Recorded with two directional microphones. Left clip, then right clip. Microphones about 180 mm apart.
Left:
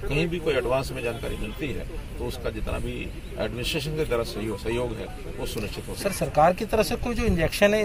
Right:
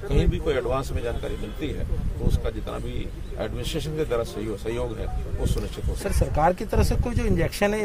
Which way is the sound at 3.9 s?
20° right (ahead or behind).